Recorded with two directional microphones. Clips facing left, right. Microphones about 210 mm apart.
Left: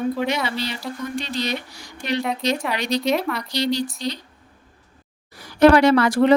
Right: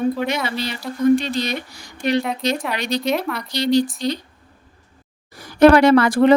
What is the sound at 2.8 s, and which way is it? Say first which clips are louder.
Speech: even; 50° right (ahead or behind).